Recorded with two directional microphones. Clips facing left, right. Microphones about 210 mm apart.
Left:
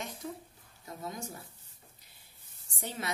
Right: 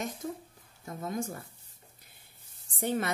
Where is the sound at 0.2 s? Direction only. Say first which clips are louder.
Right 4 dB; 45° right (ahead or behind).